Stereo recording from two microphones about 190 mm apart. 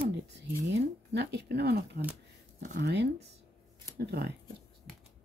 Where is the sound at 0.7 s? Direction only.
65° right (ahead or behind).